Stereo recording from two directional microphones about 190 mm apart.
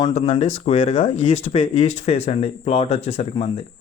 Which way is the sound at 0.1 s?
35° left (ahead or behind).